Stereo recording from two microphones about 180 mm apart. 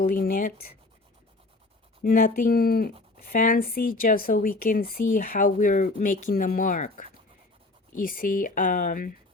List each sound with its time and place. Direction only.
0.0 s speech: 50° left (ahead or behind)
2.0 s speech: 50° left (ahead or behind)